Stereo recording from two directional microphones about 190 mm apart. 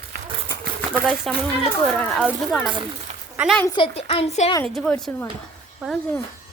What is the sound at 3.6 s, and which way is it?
Speech, 25° left (ahead or behind).